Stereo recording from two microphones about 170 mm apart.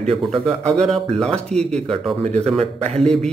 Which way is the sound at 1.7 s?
40° right (ahead or behind).